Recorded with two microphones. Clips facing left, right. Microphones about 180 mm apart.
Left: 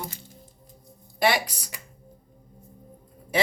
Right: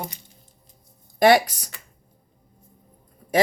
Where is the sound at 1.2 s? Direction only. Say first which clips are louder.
Right 8 dB; 45° right (ahead or behind).